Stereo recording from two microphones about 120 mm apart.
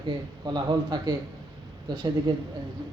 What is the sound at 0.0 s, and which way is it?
Speech, 40° right (ahead or behind).